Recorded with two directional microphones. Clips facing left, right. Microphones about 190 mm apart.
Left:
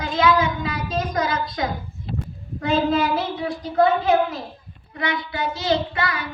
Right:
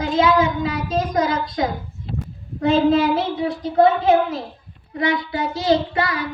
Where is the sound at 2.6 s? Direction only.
30° right (ahead or behind).